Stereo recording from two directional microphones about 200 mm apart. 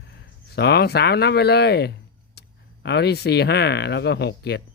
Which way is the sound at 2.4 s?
55° left (ahead or behind).